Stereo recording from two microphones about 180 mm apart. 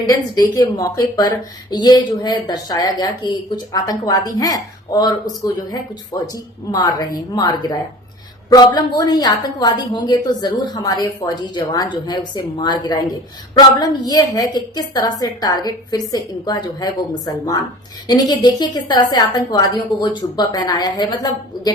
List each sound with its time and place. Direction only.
0.0 s a woman's voice: 20° left (ahead or behind)